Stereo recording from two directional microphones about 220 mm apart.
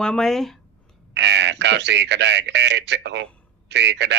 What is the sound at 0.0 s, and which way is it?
Speech, 5° left (ahead or behind).